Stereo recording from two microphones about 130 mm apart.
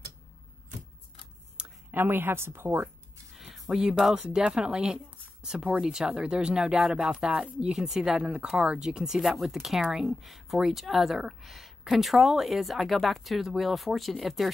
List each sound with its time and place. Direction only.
1.6 s speech: 15° right (ahead or behind)
3.3 s speech: centre (ahead or behind)